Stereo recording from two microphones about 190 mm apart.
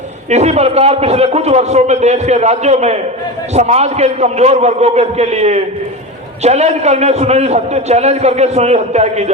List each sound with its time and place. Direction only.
0.3 s a man's voice: 35° right (ahead or behind)